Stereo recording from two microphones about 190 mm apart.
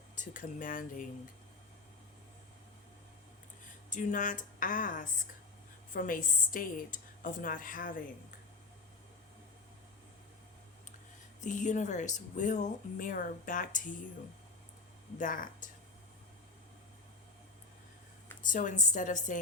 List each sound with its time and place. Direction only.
0.2 s a woman's voice: 40° left (ahead or behind)
3.8 s a woman's voice: 45° left (ahead or behind)
11.3 s speech: 40° left (ahead or behind)
15.2 s a woman's voice: 45° left (ahead or behind)
18.4 s a woman's voice: 40° left (ahead or behind)